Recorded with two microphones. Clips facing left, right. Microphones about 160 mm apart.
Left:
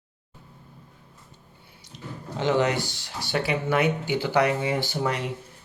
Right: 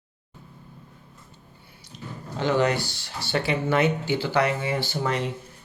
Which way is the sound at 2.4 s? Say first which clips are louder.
Even; 20° left (ahead or behind).